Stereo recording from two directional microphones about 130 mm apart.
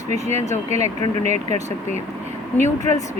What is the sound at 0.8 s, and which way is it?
Speech, 60° right (ahead or behind).